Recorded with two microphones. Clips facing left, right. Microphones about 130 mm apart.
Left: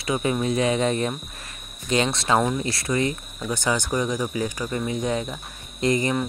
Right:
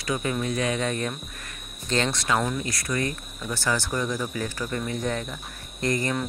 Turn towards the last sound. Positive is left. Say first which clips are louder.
# left 4 dB
turn(degrees=20)  # may be behind; listen again after turning